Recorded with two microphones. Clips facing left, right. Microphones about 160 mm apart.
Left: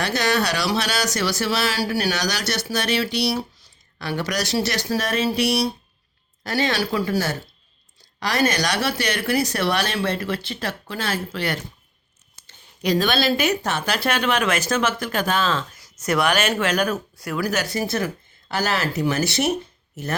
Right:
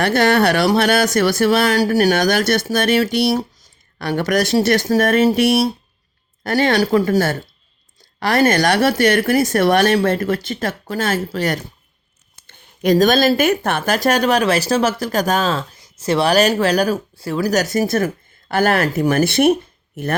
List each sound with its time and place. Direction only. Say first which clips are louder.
0.0 s speech: right 7 dB; 55° right (ahead or behind); by 15.8 s 40° right (ahead or behind)
15.8 s speech: right 5 dB; 30° right (ahead or behind); by 20.1 s 55° right (ahead or behind)